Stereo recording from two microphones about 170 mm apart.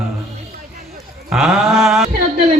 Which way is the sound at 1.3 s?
Centre (ahead or behind).